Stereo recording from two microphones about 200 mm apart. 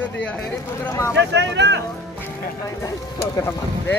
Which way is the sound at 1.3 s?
60° right (ahead or behind).